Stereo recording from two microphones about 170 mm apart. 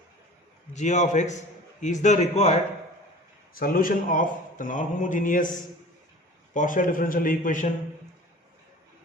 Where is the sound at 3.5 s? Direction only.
55° left (ahead or behind).